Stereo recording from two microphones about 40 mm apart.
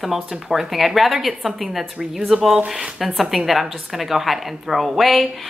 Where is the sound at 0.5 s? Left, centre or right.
Centre.